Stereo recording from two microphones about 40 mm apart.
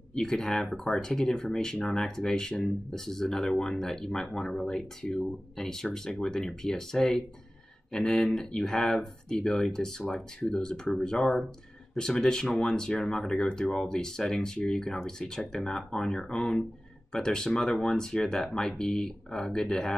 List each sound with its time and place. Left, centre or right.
0.1 s speech: centre
8.5 s speech: centre